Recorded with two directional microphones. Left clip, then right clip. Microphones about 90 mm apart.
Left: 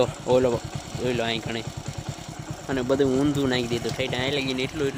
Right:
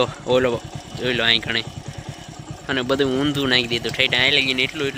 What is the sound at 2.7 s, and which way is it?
Speech, centre (ahead or behind).